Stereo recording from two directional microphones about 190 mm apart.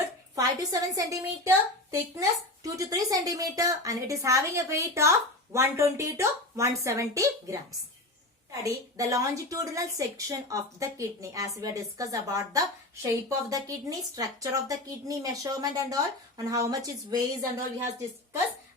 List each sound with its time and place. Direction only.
0.3 s a woman's voice: 20° right (ahead or behind)
8.6 s a woman's voice: 15° right (ahead or behind)